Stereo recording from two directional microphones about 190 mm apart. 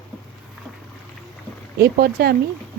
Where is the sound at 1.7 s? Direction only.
55° right (ahead or behind).